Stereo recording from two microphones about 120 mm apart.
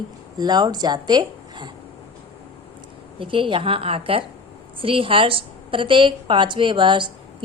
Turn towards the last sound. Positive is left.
turn(degrees=-40)  # may be behind; listen again after turning